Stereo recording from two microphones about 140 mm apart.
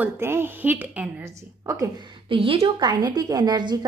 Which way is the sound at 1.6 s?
25° right (ahead or behind).